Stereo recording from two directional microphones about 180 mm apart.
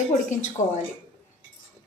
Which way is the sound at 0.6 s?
15° left (ahead or behind).